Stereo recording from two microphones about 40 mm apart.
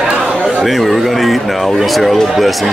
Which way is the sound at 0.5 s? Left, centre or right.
Centre.